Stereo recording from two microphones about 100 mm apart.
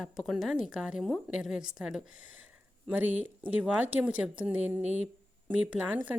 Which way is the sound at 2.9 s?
15° right (ahead or behind).